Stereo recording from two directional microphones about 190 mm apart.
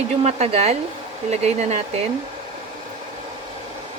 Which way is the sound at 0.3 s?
35° right (ahead or behind).